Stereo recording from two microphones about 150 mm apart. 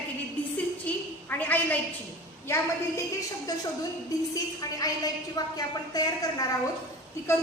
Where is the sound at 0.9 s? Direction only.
10° left (ahead or behind).